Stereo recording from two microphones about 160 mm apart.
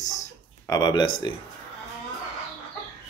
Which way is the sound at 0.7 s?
25° left (ahead or behind).